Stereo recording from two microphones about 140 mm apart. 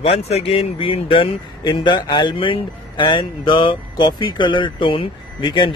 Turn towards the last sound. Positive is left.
turn(degrees=35)  # may be behind; listen again after turning